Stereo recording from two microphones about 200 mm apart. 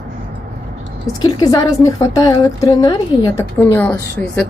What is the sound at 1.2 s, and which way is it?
A woman's voice, 20° left (ahead or behind).